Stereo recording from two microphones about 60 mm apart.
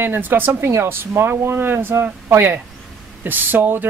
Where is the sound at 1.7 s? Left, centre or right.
Right.